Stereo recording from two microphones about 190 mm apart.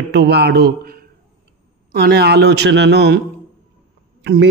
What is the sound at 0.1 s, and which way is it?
Speech, 60° right (ahead or behind).